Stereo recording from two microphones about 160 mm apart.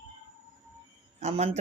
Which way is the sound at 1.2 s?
45° right (ahead or behind).